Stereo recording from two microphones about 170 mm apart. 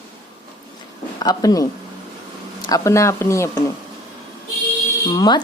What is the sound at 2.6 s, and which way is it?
Speech, 20° left (ahead or behind).